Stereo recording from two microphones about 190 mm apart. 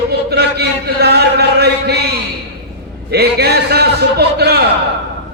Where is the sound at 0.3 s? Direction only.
60° right (ahead or behind).